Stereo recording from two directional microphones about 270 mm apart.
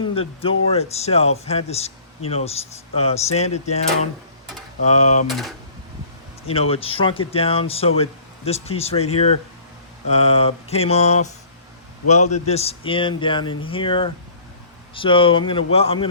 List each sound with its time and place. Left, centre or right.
0.0 s speech: centre
4.9 s speech: left
5.3 s speech: centre
6.5 s speech: left